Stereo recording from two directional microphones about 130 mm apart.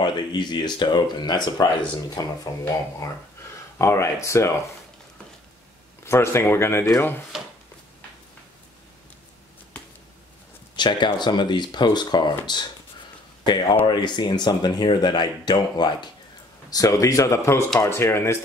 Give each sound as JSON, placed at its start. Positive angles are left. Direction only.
{"t": 0.0, "sound": "speech", "side_deg": 35}
{"t": 3.7, "sound": "speech", "side_deg": 20}
{"t": 6.0, "sound": "speech", "side_deg": 20}
{"t": 10.8, "sound": "speech", "side_deg": 35}
{"t": 13.8, "sound": "speech", "side_deg": 35}